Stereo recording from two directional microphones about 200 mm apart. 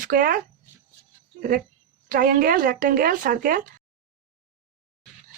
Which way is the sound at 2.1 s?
45° right (ahead or behind).